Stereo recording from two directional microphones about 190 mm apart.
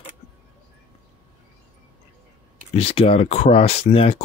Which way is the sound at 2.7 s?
30° left (ahead or behind).